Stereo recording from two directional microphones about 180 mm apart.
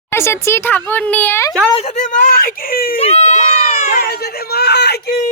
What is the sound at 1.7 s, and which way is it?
Speech, 40° left (ahead or behind).